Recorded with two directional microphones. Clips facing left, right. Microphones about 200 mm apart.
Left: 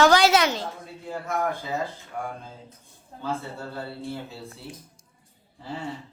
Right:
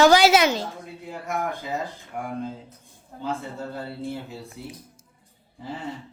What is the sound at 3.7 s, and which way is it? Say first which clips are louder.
Speech: even; 15° right (ahead or behind).